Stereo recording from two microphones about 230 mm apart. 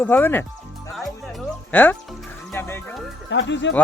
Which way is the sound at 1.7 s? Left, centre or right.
Centre.